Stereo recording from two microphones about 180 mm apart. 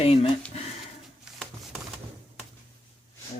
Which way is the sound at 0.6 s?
35° left (ahead or behind).